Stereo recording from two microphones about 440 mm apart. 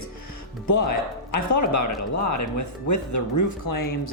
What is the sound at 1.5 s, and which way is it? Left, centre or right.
Speech, left.